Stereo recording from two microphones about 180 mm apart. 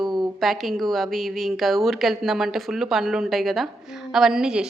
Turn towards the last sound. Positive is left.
turn(degrees=-5)  # may be behind; listen again after turning